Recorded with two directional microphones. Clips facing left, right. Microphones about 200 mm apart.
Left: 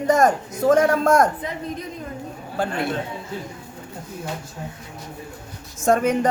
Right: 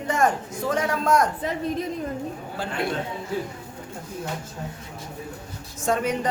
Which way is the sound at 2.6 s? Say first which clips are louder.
Left 7 dB; 50° left (ahead or behind).